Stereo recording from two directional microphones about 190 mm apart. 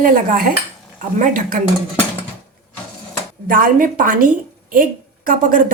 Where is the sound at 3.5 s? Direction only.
50° right (ahead or behind).